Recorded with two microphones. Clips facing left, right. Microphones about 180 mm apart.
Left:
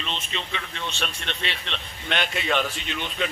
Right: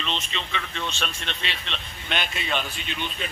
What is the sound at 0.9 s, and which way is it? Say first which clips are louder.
A man's voice: left 1 dB; 60° left (ahead or behind).